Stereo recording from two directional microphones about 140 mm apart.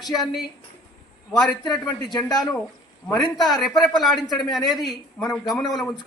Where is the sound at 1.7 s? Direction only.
30° left (ahead or behind).